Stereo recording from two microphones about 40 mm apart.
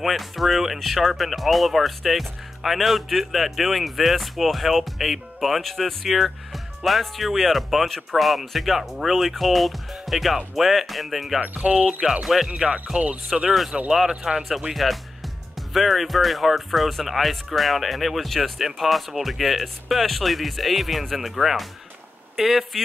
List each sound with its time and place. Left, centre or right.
0.0 s speech: centre
11.6 s speech: right
12.1 s speech: centre
12.9 s speech: right
13.3 s speech: centre
14.0 s speech: centre
14.7 s speech: centre